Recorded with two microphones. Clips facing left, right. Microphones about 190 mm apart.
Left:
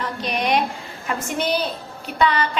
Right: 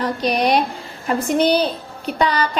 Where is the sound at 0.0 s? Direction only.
35° right (ahead or behind).